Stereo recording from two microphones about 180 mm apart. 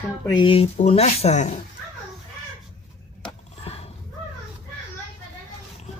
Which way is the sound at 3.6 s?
35° left (ahead or behind).